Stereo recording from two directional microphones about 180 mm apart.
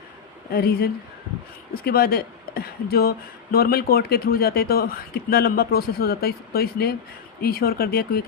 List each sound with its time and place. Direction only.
0.5 s speech: 60° left (ahead or behind)